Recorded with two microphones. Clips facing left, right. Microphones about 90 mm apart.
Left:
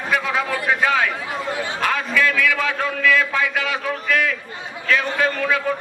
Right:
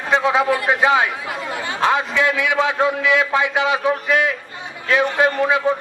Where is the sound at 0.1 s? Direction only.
25° right (ahead or behind).